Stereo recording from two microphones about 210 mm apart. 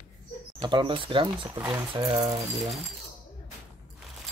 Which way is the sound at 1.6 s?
10° right (ahead or behind).